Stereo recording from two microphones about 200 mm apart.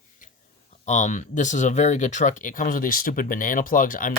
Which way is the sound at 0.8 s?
35° left (ahead or behind).